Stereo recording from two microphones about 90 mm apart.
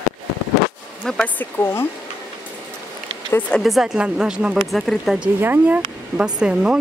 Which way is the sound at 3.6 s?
Centre (ahead or behind).